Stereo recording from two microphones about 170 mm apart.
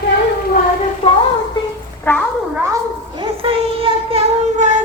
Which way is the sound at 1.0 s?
40° left (ahead or behind).